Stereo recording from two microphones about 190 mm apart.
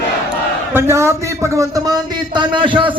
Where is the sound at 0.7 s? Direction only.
10° right (ahead or behind).